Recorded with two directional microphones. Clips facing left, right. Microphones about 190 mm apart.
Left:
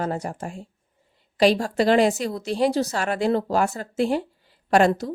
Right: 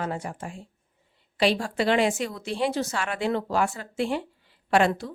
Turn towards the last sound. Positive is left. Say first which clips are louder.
# left 4 dB
turn(degrees=40)  # may be behind; listen again after turning